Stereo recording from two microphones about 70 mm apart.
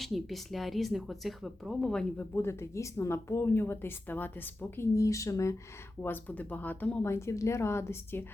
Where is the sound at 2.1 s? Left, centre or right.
Left.